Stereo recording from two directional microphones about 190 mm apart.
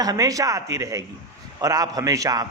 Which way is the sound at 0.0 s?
20° right (ahead or behind).